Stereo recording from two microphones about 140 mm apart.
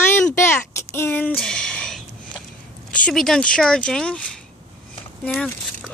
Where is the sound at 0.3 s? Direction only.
20° left (ahead or behind).